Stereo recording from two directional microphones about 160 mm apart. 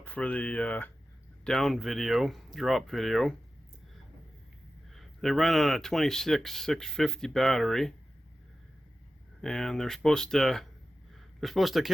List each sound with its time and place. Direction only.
0.0 s speech: 10° left (ahead or behind)
4.9 s speech: centre (ahead or behind)
9.4 s speech: centre (ahead or behind)